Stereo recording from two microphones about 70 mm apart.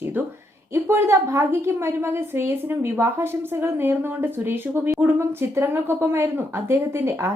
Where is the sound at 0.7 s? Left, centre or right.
Right.